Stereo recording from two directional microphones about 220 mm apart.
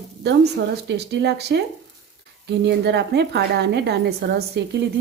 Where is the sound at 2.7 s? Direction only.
50° right (ahead or behind).